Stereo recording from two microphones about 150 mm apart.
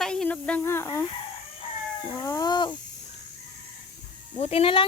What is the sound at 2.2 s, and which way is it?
Speech, 20° left (ahead or behind).